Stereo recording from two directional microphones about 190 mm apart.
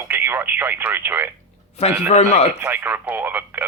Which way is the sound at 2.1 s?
35° left (ahead or behind).